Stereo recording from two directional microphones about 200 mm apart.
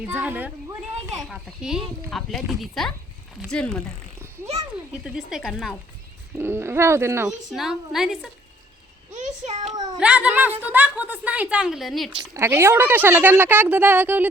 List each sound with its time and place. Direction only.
0.1 s a child's voice: 10° right (ahead or behind)
5.0 s speech: centre (ahead or behind)
6.3 s a woman's voice: 10° right (ahead or behind)
7.5 s speech: centre (ahead or behind)
9.1 s a sound: 35° right (ahead or behind)
10.0 s a woman's voice: 5° right (ahead or behind)
12.1 s a woman's voice: 15° right (ahead or behind)